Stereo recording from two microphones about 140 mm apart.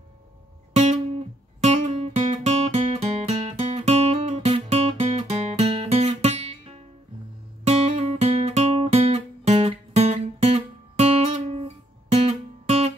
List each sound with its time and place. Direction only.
1.6 s music: 50° right (ahead or behind)
7.6 s guitar: 50° right (ahead or behind)